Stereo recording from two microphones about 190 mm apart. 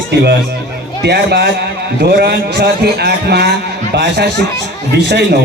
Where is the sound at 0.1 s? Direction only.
60° right (ahead or behind).